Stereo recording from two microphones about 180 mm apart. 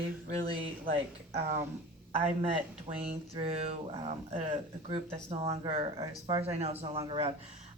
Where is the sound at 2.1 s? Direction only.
35° right (ahead or behind).